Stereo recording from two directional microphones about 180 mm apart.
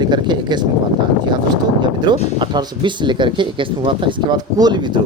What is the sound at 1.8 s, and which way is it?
Speech, 25° right (ahead or behind).